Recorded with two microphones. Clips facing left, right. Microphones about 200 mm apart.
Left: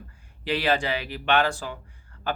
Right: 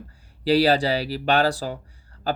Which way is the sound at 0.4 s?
35° right (ahead or behind).